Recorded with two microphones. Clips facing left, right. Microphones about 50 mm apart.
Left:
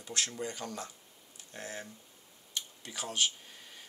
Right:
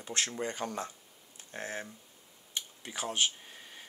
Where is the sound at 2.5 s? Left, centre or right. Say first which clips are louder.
Right 1 dB; right.